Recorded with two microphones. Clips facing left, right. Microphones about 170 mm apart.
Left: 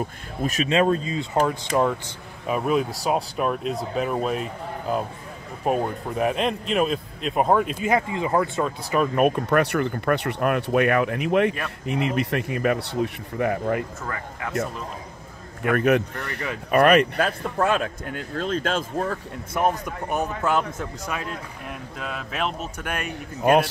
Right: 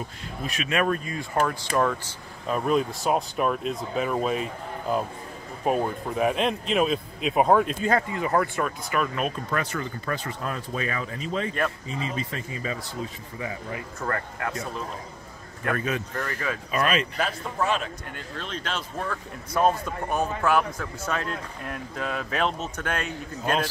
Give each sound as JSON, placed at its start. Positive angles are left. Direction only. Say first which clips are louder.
{"t": 0.4, "sound": "speech", "louder": "left 7 dB", "side_deg": 45}
{"t": 0.7, "sound": "speech", "louder": "left 4 dB", "side_deg": 25}
{"t": 2.4, "sound": "speech", "louder": "left 1 dB", "side_deg": 5}
{"t": 5.7, "sound": "speech", "louder": "left 1 dB", "side_deg": 0}
{"t": 8.1, "sound": "speech", "louder": "left 2 dB", "side_deg": 20}
{"t": 9.1, "sound": "speech", "louder": "left 8 dB", "side_deg": 60}
{"t": 14.0, "sound": "speech", "louder": "right 2 dB", "side_deg": 5}
{"t": 15.7, "sound": "speech", "louder": "left 8 dB", "side_deg": 65}
{"t": 19.5, "sound": "speech", "louder": "right 1 dB", "side_deg": 15}